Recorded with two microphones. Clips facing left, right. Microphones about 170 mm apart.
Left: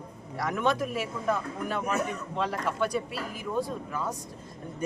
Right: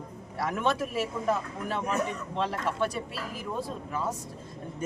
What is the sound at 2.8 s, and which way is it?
Speech, centre (ahead or behind).